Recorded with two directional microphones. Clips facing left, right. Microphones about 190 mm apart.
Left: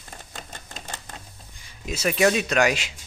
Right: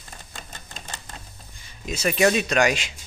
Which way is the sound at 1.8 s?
5° left (ahead or behind).